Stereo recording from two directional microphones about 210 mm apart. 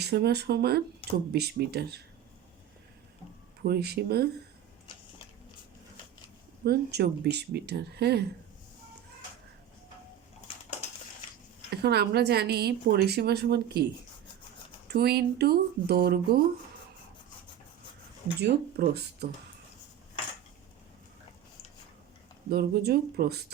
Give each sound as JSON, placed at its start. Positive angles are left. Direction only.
{"t": 0.0, "sound": "a woman's voice", "side_deg": -50}
{"t": 3.6, "sound": "a woman's voice", "side_deg": -50}
{"t": 6.7, "sound": "a woman's voice", "side_deg": -50}
{"t": 10.5, "sound": "crushing", "side_deg": 25}
{"t": 11.8, "sound": "a woman's voice", "side_deg": -50}
{"t": 14.8, "sound": "a woman's voice", "side_deg": -50}
{"t": 18.3, "sound": "a woman's voice", "side_deg": -50}
{"t": 22.4, "sound": "a woman's voice", "side_deg": -50}